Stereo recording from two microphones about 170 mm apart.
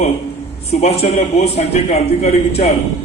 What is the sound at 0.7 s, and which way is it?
A man's voice, 40° left (ahead or behind).